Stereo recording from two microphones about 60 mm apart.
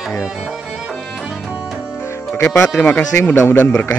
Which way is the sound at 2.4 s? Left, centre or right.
Left.